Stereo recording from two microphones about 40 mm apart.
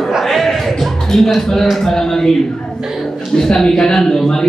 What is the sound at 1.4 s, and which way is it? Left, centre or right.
Speech, centre.